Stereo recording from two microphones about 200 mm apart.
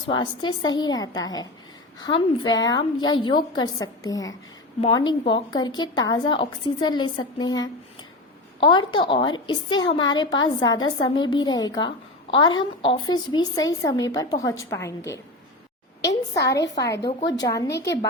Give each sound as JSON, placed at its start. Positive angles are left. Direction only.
{"t": 0.1, "sound": "a woman's voice", "side_deg": 25}
{"t": 8.6, "sound": "a woman's voice", "side_deg": 25}